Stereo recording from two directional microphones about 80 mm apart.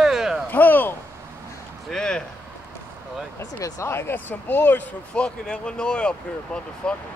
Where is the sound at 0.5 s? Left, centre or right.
Left.